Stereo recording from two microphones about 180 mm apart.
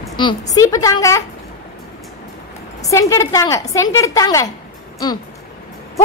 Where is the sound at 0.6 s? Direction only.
20° left (ahead or behind).